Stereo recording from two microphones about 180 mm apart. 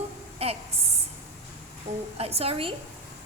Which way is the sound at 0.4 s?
35° right (ahead or behind).